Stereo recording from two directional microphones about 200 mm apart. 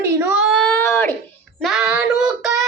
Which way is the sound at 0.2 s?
10° right (ahead or behind).